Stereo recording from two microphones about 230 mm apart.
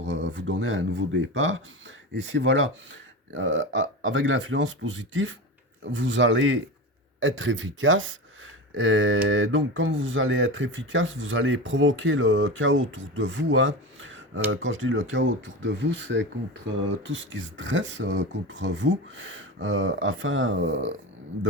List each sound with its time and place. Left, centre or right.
0.0 s speech: right